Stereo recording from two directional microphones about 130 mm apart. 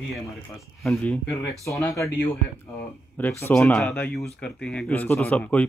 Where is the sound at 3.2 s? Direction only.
15° left (ahead or behind).